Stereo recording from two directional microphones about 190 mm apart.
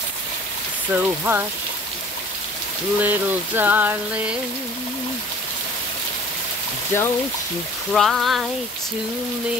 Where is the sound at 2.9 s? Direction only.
10° right (ahead or behind).